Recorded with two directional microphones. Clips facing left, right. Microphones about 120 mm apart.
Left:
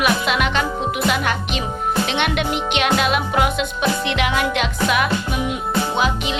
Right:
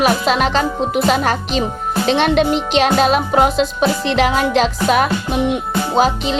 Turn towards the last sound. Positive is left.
turn(degrees=-35)  # may be behind; listen again after turning